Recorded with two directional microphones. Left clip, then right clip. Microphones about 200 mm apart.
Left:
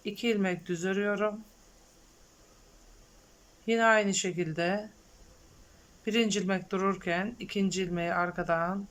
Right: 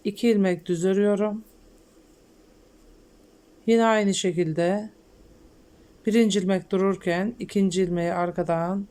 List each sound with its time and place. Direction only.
0.0 s speech: 20° right (ahead or behind)
3.7 s speech: 20° right (ahead or behind)
6.1 s speech: 20° right (ahead or behind)